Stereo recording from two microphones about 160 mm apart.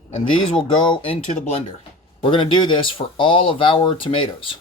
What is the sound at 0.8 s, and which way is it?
Speech, 35° left (ahead or behind).